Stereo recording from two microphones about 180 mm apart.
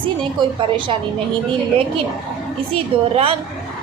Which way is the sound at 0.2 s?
25° right (ahead or behind).